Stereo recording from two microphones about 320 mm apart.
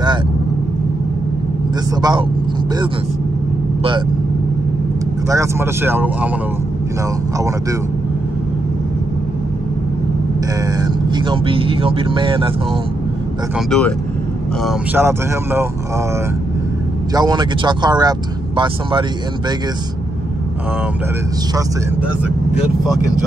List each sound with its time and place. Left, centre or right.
2.0 s speech: centre
5.3 s speech: centre
10.8 s speech: centre
13.7 s speech: centre
17.1 s speech: centre